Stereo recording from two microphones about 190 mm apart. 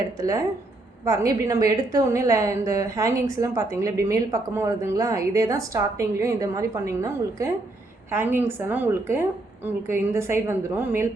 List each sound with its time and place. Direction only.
0.2 s a woman's voice: 15° right (ahead or behind)